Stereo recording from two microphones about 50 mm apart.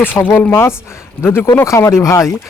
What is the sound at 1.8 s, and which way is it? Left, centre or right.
Speech, left.